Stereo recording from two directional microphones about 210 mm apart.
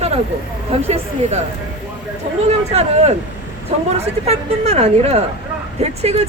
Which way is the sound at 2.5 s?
30° right (ahead or behind).